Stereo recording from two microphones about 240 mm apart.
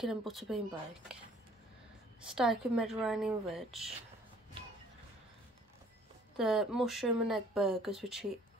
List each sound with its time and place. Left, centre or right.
0.0 s speech: centre
2.3 s speech: centre
6.3 s speech: centre